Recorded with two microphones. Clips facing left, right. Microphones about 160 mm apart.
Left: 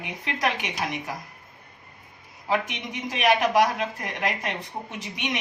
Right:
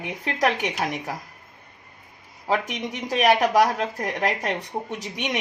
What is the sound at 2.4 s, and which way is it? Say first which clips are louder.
Speech: right 2 dB; 40° right (ahead or behind).